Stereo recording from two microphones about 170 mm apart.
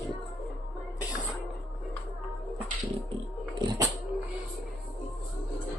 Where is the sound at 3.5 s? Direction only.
25° right (ahead or behind).